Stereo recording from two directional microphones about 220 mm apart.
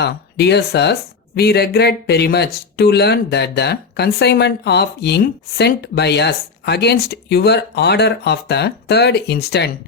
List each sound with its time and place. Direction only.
0.0 s speech: 50° left (ahead or behind)